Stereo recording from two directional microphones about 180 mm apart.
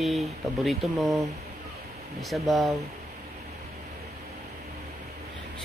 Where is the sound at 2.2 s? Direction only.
Centre (ahead or behind).